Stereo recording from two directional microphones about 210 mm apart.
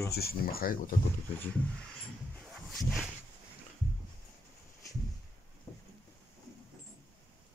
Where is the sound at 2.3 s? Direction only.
Centre (ahead or behind).